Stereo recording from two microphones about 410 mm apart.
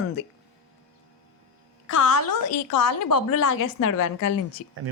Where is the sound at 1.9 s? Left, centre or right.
Left.